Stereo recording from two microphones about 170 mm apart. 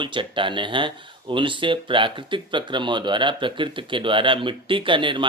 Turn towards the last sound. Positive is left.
turn(degrees=-30)  # may be behind; listen again after turning